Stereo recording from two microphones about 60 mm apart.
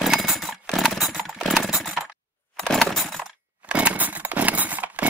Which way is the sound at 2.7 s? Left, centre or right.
Centre.